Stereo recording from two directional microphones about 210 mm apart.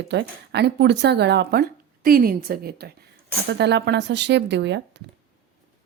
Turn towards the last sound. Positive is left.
turn(degrees=-55)  # may be behind; listen again after turning